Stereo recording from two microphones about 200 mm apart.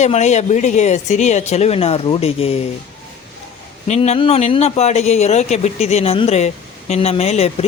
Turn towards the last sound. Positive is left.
turn(degrees=30)  # may be behind; listen again after turning